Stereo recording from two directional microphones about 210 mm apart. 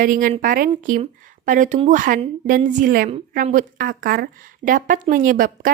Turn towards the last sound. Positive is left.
turn(degrees=-45)  # may be behind; listen again after turning